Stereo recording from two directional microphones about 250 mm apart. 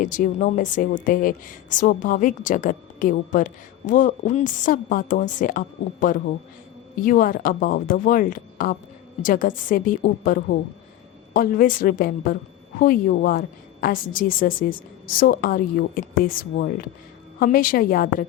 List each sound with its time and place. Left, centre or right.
0.0 s a woman's voice: left